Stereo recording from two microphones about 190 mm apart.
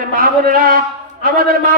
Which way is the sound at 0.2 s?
50° right (ahead or behind).